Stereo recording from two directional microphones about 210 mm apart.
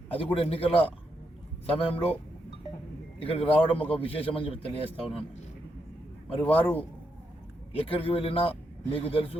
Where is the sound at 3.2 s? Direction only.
25° left (ahead or behind).